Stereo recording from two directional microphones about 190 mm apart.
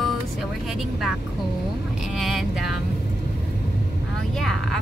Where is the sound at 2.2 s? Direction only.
Centre (ahead or behind).